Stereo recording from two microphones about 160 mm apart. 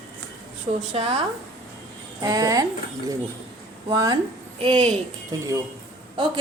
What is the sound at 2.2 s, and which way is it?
Speech, 20° right (ahead or behind).